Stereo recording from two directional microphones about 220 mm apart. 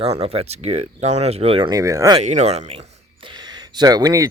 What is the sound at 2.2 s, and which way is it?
Speech, 30° right (ahead or behind).